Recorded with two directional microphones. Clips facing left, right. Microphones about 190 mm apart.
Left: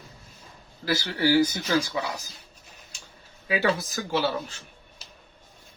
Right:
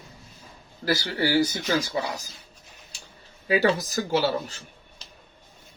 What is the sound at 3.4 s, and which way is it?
Speech, 40° right (ahead or behind).